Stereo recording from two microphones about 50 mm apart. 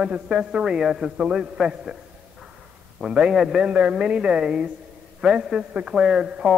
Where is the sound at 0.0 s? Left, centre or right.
Centre.